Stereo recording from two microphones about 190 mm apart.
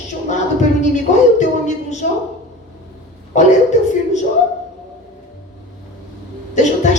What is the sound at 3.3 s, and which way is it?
Speech, 40° left (ahead or behind).